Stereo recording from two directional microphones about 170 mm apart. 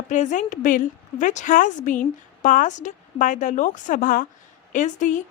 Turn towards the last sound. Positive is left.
turn(degrees=45)  # may be behind; listen again after turning